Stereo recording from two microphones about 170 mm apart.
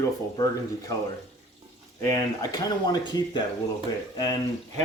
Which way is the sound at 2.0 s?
20° left (ahead or behind).